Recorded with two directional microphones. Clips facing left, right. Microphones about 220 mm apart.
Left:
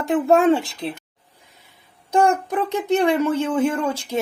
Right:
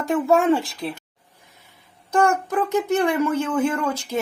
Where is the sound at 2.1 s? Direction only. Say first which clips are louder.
Left 1 dB; 15° left (ahead or behind).